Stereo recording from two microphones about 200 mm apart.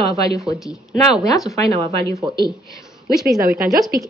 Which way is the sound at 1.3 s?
Centre (ahead or behind).